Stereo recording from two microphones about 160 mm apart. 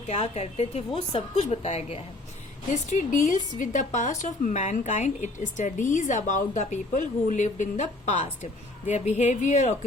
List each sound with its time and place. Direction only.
0.1 s a woman's voice: 40° left (ahead or behind)
2.7 s speech: 50° left (ahead or behind)